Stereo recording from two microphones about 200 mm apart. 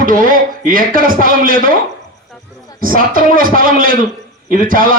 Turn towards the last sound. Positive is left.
turn(degrees=-45)  # may be behind; listen again after turning